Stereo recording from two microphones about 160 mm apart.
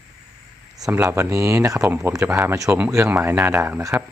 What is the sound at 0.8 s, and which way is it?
Speech, 10° right (ahead or behind).